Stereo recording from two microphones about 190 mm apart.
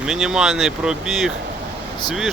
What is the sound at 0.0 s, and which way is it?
Speech, 5° right (ahead or behind).